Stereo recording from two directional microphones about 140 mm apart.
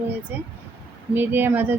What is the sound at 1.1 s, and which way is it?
Speech, 15° right (ahead or behind).